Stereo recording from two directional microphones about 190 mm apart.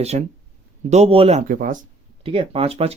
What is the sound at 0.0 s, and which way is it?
Speech, 35° right (ahead or behind).